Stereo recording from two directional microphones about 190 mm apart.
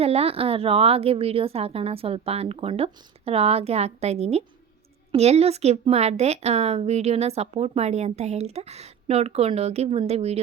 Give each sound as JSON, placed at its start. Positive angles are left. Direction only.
{"t": 0.0, "sound": "speech", "side_deg": -30}